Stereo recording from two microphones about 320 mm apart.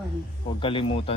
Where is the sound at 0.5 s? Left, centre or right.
Centre.